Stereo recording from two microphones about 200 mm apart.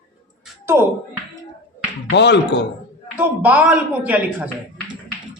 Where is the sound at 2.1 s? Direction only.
60° left (ahead or behind).